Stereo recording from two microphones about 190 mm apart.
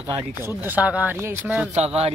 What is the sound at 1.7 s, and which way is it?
Speech, 35° right (ahead or behind).